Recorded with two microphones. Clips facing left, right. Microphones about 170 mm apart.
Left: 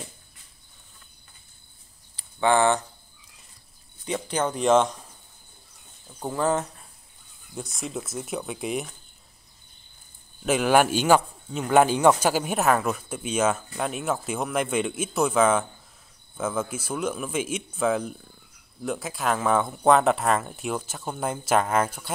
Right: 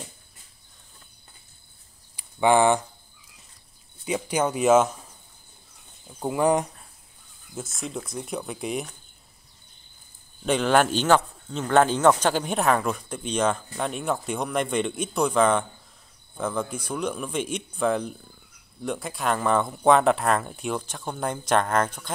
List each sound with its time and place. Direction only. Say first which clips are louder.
2.1 s a sound: right 2 dB; 15° right (ahead or behind)
4.0 s speech: right 2 dB; 10° right (ahead or behind)
6.0 s speech: right 3 dB; 10° right (ahead or behind)
7.5 s speech: even; centre (ahead or behind)
10.4 s speech: left 1 dB; 5° left (ahead or behind)